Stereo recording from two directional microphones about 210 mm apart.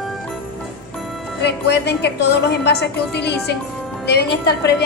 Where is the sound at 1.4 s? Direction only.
55° left (ahead or behind).